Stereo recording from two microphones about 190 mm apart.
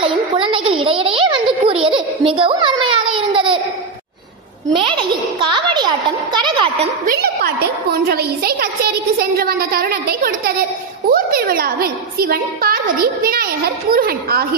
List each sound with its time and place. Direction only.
0.0 s a sound: 25° right (ahead or behind)
3.2 s babbling: 25° right (ahead or behind)
4.9 s a child's voice: 25° right (ahead or behind)
7.1 s a woman's voice: 55° right (ahead or behind)